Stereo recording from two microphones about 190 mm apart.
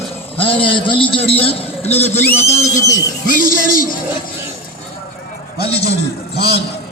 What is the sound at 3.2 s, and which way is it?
Speech, 45° left (ahead or behind).